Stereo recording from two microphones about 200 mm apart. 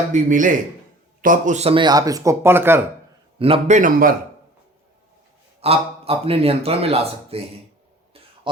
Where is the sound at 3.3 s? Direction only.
30° right (ahead or behind).